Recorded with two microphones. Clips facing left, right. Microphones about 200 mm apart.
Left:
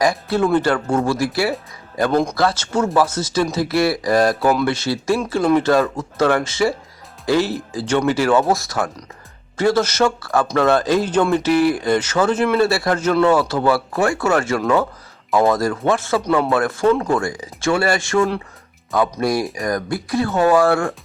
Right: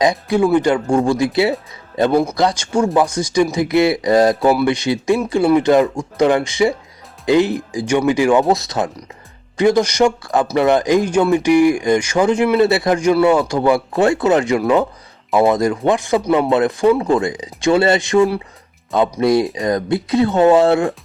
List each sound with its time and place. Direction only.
0.0 s speech: 15° right (ahead or behind)